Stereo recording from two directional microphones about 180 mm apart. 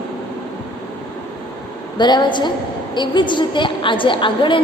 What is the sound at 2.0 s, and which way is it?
A woman's voice, 25° left (ahead or behind).